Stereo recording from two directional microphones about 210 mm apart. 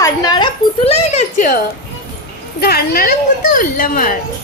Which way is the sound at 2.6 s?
45° left (ahead or behind).